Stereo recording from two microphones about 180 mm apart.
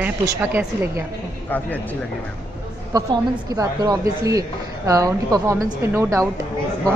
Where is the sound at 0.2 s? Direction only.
10° right (ahead or behind).